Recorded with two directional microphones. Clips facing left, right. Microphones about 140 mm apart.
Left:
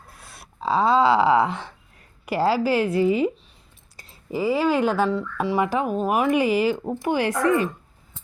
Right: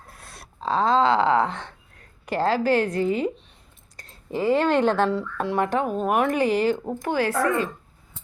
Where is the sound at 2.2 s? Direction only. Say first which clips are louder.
Left 1 dB; 10° left (ahead or behind).